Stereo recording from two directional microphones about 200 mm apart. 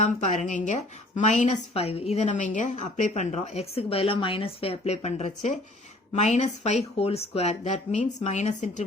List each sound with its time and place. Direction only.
0.5 s a woman's voice: 35° left (ahead or behind)